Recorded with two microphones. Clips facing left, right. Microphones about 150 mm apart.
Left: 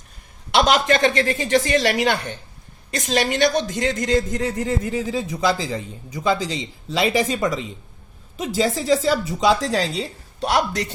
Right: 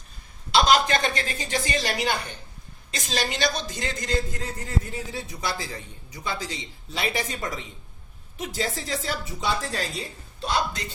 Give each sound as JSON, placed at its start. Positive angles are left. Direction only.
{"t": 0.5, "sound": "speech", "side_deg": 70}
{"t": 2.9, "sound": "a woman's voice", "side_deg": 60}
{"t": 3.6, "sound": "a man's voice", "side_deg": 70}